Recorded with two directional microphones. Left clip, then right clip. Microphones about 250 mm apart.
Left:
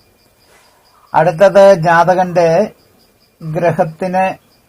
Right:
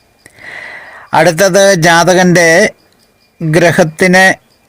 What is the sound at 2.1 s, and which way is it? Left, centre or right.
Speech, right.